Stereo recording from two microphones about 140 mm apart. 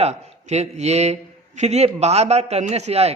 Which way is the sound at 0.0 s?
55° right (ahead or behind).